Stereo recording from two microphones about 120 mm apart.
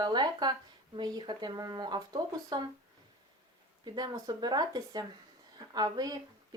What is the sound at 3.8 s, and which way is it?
Speech, 35° right (ahead or behind).